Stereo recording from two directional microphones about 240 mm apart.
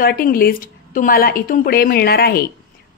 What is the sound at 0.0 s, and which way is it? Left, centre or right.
Speech, left.